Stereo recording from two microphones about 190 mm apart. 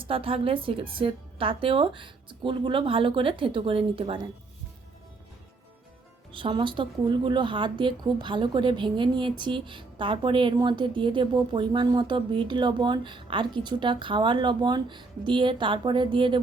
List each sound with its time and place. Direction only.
0.0 s a woman's voice: 30° right (ahead or behind)
6.3 s a woman's voice: 25° right (ahead or behind)